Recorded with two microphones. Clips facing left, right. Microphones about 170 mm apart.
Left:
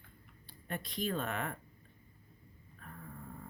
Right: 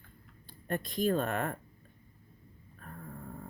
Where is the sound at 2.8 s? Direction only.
45° right (ahead or behind).